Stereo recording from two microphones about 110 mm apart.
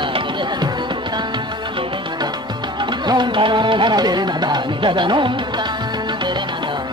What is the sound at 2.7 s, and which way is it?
Music, 45° right (ahead or behind).